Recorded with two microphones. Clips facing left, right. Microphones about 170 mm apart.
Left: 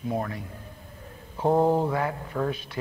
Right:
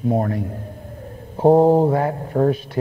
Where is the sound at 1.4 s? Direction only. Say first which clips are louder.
Right 9 dB; 35° right (ahead or behind).